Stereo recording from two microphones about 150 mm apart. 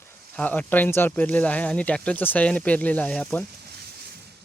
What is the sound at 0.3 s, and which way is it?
Speech, 10° left (ahead or behind).